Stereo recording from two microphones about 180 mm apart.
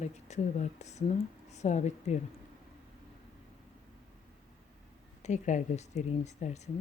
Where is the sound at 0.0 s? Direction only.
40° left (ahead or behind).